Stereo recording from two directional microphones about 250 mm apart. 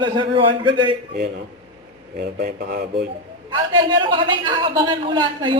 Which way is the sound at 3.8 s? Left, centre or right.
Centre.